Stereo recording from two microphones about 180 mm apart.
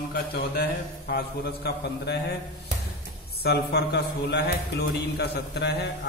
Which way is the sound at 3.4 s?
65° left (ahead or behind).